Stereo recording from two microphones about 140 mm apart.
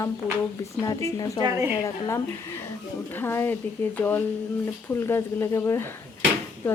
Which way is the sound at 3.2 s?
15° left (ahead or behind).